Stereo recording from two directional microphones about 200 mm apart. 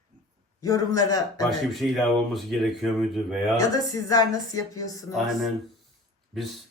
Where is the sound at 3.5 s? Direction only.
20° left (ahead or behind).